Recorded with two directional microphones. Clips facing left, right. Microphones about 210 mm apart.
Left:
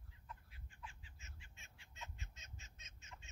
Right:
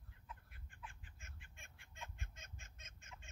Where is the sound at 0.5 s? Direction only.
55° right (ahead or behind).